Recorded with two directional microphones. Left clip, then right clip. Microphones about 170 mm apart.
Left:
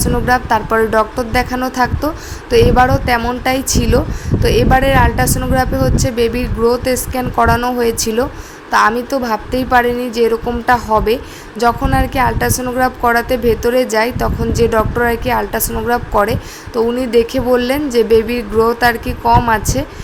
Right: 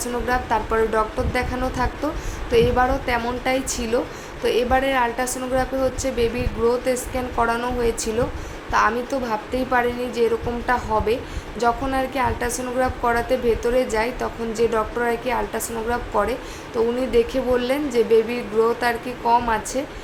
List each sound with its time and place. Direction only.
0.0 s a woman's voice: 55° left (ahead or behind)